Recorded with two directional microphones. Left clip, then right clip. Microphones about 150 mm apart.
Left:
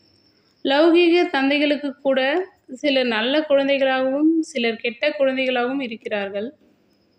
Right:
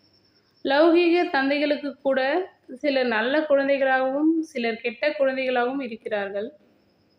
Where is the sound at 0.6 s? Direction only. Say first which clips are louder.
Left 3 dB; 25° left (ahead or behind).